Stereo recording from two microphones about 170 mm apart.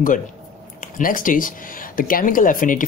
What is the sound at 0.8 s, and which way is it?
Speech, 55° left (ahead or behind).